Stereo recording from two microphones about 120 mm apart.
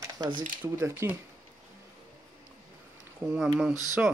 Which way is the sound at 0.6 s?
20° right (ahead or behind).